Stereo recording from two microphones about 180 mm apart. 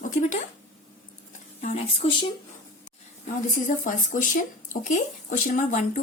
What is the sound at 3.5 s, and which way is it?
Speech, 45° left (ahead or behind).